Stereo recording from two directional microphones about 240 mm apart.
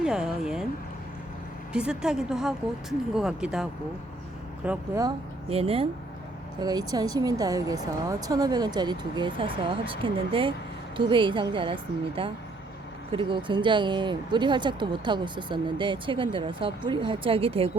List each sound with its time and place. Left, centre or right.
0.0 s a woman's voice: centre
1.7 s a woman's voice: centre; by 17.7 s right